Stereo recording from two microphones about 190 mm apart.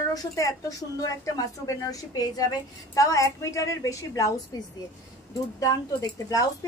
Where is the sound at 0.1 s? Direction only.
20° left (ahead or behind).